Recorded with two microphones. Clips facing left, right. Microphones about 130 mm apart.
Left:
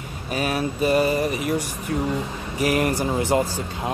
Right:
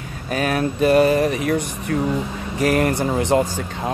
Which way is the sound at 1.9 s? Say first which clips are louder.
Right 3 dB; 60° right (ahead or behind).